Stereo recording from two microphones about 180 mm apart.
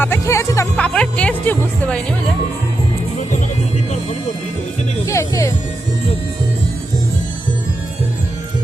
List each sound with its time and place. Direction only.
0.0 s music: 15° left (ahead or behind)
5.0 s music: 15° left (ahead or behind)